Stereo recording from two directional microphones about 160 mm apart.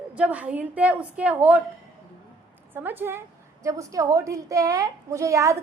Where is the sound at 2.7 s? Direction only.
10° right (ahead or behind).